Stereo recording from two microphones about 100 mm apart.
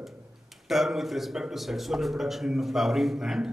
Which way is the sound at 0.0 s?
Centre (ahead or behind).